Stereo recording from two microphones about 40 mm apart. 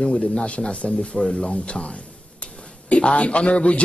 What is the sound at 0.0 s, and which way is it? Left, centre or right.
A man's voice, left.